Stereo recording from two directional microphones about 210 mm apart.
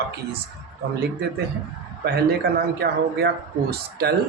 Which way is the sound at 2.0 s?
50° right (ahead or behind).